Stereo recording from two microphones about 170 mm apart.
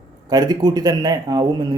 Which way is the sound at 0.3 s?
25° right (ahead or behind).